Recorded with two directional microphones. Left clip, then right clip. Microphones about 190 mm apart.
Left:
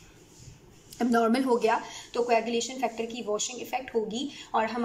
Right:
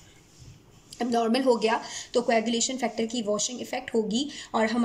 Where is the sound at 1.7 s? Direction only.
20° right (ahead or behind).